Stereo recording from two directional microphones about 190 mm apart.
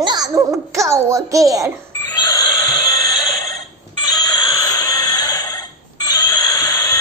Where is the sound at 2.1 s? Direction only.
20° left (ahead or behind).